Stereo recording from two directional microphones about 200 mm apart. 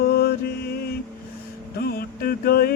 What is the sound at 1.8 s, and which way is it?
Mantra, 50° left (ahead or behind).